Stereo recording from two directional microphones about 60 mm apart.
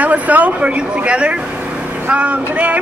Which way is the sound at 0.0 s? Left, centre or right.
Right.